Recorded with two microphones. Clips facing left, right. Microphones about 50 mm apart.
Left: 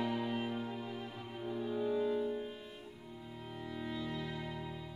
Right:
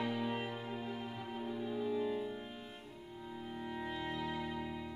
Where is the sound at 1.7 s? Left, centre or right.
Centre.